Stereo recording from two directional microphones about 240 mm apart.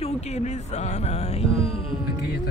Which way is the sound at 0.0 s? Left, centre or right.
Left.